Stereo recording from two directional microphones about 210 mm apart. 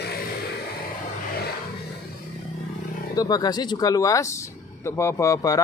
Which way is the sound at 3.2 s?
20° left (ahead or behind).